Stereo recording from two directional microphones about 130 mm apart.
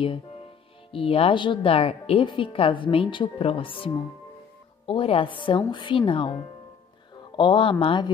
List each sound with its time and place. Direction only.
0.9 s a woman's voice: 45° left (ahead or behind)
7.3 s a woman's voice: 40° left (ahead or behind)